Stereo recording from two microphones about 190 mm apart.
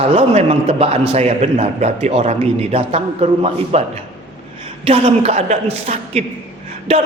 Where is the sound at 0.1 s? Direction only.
35° right (ahead or behind).